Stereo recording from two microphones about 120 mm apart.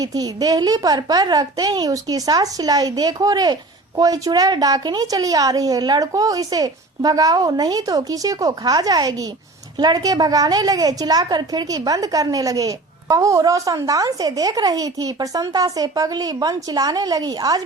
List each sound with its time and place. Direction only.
0.0 s a child's voice: 30° right (ahead or behind)